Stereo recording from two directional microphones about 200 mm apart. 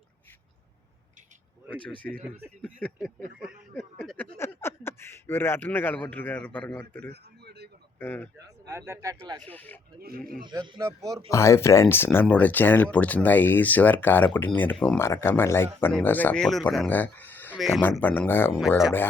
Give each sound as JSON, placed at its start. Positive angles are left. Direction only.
{"t": 2.0, "sound": "speech", "side_deg": 5}
{"t": 3.4, "sound": "speech", "side_deg": -5}
{"t": 3.9, "sound": "a sound", "side_deg": 5}
{"t": 4.4, "sound": "speech", "side_deg": 10}
{"t": 7.1, "sound": "a sound", "side_deg": -55}
{"t": 7.9, "sound": "speech", "side_deg": 10}
{"t": 8.6, "sound": "speech", "side_deg": -10}
{"t": 9.4, "sound": "speech", "side_deg": 10}
{"t": 10.0, "sound": "speech", "side_deg": -50}
{"t": 10.4, "sound": "speech", "side_deg": -20}
{"t": 11.3, "sound": "speech", "side_deg": 15}